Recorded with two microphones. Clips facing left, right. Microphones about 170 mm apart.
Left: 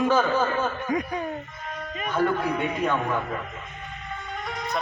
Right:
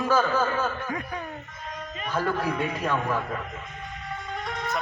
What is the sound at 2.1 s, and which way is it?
Speech, 5° right (ahead or behind).